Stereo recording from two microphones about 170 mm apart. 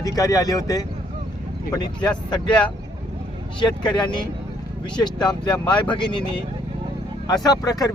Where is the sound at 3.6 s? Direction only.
25° left (ahead or behind).